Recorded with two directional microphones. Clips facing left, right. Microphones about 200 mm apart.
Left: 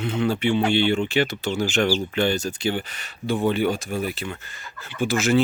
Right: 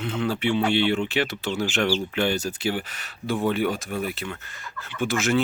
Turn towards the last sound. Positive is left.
turn(degrees=0)  # may be behind; listen again after turning